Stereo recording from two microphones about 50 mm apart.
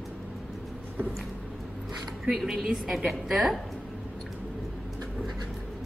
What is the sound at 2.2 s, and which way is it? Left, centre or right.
A woman's voice, centre.